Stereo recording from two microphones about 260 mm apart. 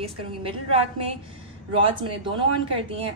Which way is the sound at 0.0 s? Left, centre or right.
Right.